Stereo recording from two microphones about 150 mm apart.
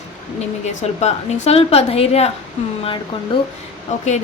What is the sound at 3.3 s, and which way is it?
Speech, 35° left (ahead or behind).